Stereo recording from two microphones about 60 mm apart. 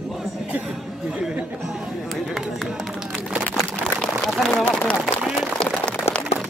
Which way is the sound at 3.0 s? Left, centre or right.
Centre.